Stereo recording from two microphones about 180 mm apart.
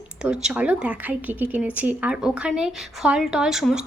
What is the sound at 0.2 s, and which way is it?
A woman's voice, 5° right (ahead or behind).